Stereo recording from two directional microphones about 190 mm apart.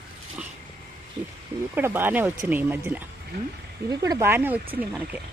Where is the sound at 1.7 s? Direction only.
10° right (ahead or behind).